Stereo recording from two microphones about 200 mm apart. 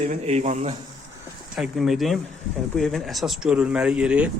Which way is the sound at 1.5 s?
Centre (ahead or behind).